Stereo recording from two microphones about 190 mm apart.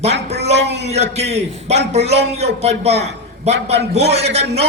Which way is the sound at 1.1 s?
35° right (ahead or behind).